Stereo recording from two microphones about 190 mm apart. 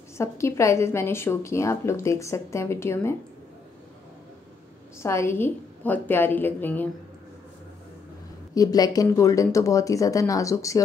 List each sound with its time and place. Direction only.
0.2 s a woman's voice: 15° left (ahead or behind)
5.0 s a woman's voice: 15° left (ahead or behind)
8.5 s a woman's voice: 20° left (ahead or behind)